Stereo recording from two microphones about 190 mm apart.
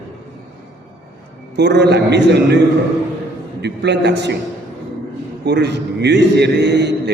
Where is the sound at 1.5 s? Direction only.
65° right (ahead or behind).